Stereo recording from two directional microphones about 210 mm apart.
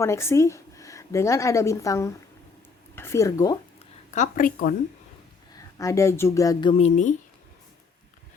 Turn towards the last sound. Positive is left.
turn(degrees=35)  # may be behind; listen again after turning